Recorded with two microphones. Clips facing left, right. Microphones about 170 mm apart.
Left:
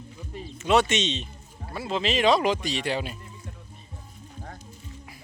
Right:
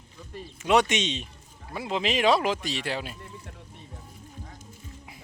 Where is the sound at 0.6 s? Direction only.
15° right (ahead or behind).